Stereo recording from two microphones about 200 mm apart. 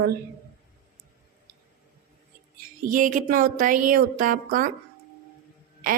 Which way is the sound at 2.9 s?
40° right (ahead or behind).